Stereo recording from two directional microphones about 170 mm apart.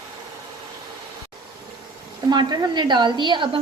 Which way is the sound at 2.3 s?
25° right (ahead or behind).